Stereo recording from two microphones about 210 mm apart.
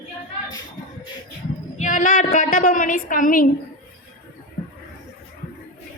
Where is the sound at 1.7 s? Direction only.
35° left (ahead or behind).